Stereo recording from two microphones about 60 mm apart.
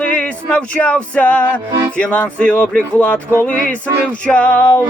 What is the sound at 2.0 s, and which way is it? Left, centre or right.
Speech, left.